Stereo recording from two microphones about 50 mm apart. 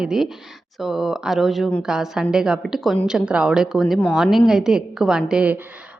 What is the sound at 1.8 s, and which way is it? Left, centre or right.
Speech, centre.